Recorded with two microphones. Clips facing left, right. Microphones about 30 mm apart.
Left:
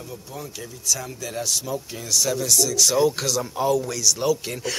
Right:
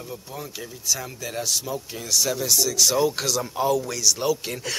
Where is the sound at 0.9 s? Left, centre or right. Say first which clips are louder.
Left 1 dB; centre.